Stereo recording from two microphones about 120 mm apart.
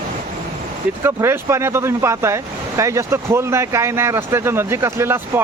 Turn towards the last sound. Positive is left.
turn(degrees=-20)  # may be behind; listen again after turning